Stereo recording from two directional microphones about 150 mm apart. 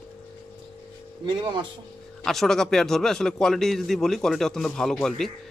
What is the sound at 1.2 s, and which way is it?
Speech, 30° right (ahead or behind).